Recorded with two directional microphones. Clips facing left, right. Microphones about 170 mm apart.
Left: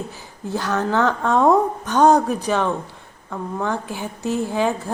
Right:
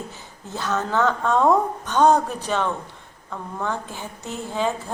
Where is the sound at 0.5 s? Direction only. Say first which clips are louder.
Left 3 dB; 15° left (ahead or behind).